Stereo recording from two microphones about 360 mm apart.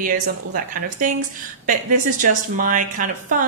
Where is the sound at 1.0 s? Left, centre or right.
Right.